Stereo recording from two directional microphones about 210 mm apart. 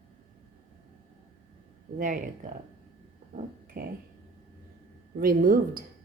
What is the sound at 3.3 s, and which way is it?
Speech, 45° right (ahead or behind).